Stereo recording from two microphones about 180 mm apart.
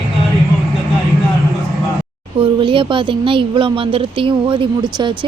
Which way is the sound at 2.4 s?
30° right (ahead or behind).